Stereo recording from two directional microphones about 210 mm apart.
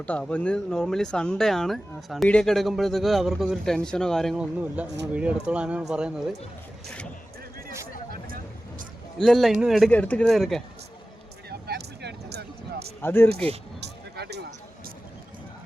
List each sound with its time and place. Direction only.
0.0 s speech: 5° left (ahead or behind)
9.1 s speech: centre (ahead or behind)
11.4 s music: 50° right (ahead or behind)
13.0 s speech: 10° left (ahead or behind)
13.8 s music: 50° right (ahead or behind)